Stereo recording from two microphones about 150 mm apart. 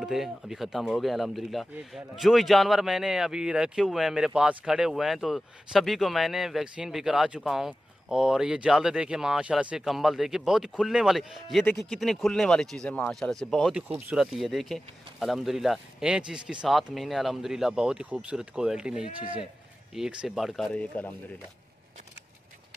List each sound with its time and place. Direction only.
0.0 s speech: centre (ahead or behind)
14.1 s speech: centre (ahead or behind)
19.1 s a man's voice: 35° right (ahead or behind)
19.9 s speech: 5° right (ahead or behind)